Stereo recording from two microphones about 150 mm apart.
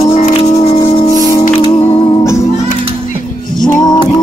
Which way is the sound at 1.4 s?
35° left (ahead or behind).